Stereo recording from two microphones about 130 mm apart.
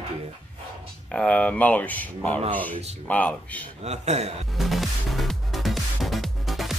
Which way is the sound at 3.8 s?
55° right (ahead or behind).